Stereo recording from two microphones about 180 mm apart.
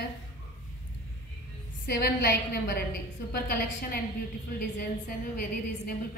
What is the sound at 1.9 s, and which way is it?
A woman's voice, 60° left (ahead or behind).